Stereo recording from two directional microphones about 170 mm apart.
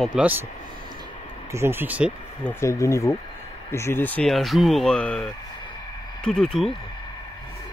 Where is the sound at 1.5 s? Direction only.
15° right (ahead or behind).